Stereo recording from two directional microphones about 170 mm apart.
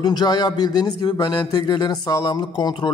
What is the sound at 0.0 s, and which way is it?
Speech, 25° left (ahead or behind).